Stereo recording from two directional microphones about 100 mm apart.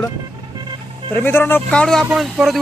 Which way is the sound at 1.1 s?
20° left (ahead or behind).